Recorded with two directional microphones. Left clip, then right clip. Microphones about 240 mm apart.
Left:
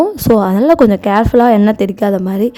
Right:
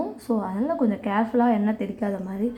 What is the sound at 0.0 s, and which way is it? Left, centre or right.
Speech, left.